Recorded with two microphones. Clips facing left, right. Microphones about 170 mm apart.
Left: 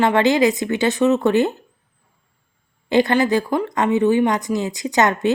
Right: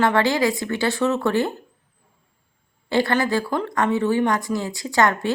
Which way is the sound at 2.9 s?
20° left (ahead or behind).